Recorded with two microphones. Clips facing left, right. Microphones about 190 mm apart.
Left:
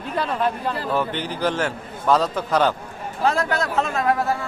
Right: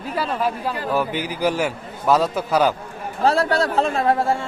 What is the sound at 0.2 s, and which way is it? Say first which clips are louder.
A man's voice: even; 5° right (ahead or behind).